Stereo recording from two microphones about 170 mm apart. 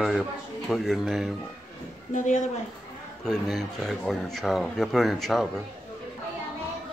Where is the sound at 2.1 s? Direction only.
50° left (ahead or behind).